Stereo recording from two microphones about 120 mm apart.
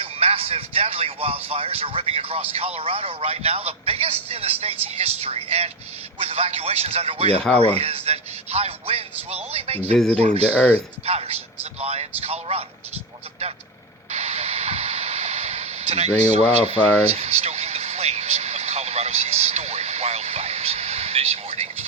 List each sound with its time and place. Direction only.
0.0 s a man's voice: 55° right (ahead or behind)
14.1 s a sound: 65° right (ahead or behind)
16.6 s vehicle: 60° right (ahead or behind)